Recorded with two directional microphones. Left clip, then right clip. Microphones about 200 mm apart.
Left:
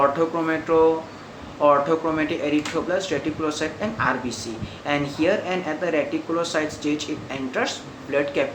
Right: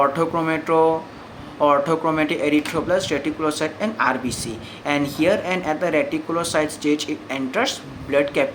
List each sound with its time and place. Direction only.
0.0 s speech: 35° right (ahead or behind)